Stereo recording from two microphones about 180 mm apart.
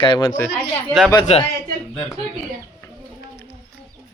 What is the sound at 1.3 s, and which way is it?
Speech, 35° left (ahead or behind).